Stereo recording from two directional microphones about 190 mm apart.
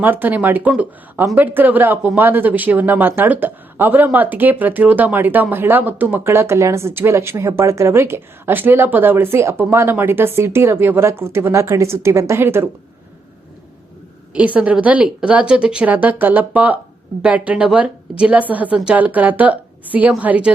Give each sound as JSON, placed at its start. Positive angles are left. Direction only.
{"t": 0.0, "sound": "speech", "side_deg": -10}
{"t": 14.3, "sound": "speech", "side_deg": -5}